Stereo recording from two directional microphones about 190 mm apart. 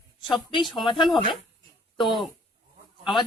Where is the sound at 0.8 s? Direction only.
25° left (ahead or behind).